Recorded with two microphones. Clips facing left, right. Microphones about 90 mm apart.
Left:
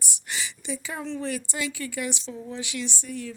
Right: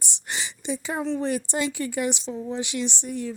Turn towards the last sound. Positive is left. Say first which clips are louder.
# right 4 dB
turn(degrees=-25)  # may be behind; listen again after turning